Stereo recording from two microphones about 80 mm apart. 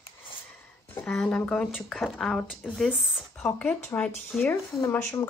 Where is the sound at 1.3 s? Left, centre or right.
Centre.